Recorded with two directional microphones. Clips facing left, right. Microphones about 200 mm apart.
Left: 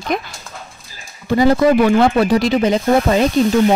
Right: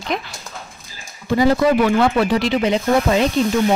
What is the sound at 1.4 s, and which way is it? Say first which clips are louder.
Speech: left 3 dB; 45° left (ahead or behind).